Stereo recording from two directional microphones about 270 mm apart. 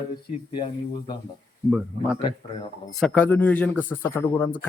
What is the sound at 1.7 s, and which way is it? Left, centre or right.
Speech, centre.